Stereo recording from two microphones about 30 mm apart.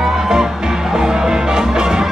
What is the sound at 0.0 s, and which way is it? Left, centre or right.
Music, centre.